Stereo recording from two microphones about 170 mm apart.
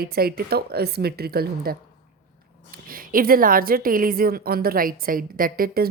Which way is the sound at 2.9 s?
55° right (ahead or behind).